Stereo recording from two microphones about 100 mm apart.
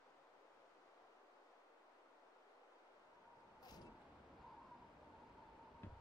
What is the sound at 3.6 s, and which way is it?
Cat, 40° left (ahead or behind).